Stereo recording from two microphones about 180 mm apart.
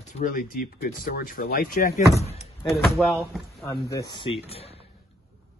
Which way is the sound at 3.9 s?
20° left (ahead or behind).